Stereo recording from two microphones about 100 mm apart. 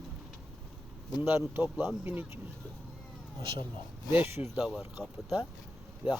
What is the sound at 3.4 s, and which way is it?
Speech, 60° right (ahead or behind).